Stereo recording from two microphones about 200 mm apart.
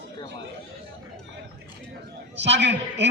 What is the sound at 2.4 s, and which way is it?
Speech, 60° right (ahead or behind).